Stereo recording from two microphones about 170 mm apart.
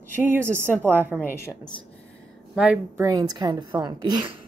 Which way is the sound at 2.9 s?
20° right (ahead or behind).